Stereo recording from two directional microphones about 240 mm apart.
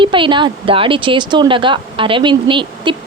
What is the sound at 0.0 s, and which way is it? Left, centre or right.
A woman's voice, centre.